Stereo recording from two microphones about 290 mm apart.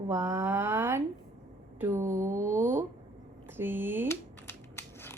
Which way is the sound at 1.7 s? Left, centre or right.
Centre.